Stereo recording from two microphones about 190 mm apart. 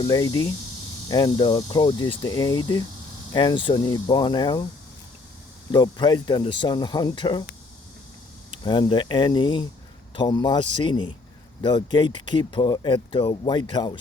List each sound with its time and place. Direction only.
0.0 s speech: 20° left (ahead or behind)
5.7 s speech: 25° left (ahead or behind)
8.4 s speech: 25° left (ahead or behind)